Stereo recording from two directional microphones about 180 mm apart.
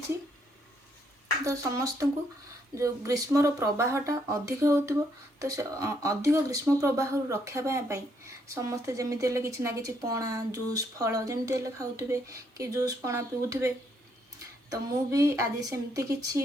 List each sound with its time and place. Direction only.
1.5 s a woman's voice: 15° right (ahead or behind)